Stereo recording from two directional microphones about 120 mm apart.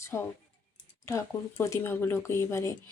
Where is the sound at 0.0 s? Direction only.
20° left (ahead or behind).